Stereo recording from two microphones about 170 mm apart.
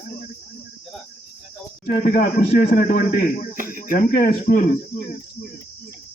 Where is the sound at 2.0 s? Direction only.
55° left (ahead or behind).